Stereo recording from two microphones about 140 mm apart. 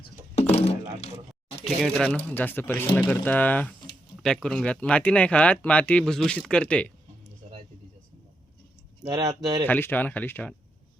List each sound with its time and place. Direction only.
0.3 s a sound: 50° left (ahead or behind)
1.6 s speech: centre (ahead or behind)
9.0 s speech: 30° right (ahead or behind)
9.6 s speech: 15° left (ahead or behind)